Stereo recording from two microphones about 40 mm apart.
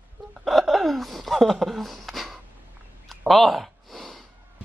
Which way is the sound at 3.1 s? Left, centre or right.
Centre.